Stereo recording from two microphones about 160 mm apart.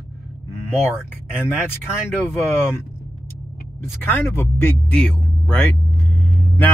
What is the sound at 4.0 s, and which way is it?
A man's voice, 15° left (ahead or behind).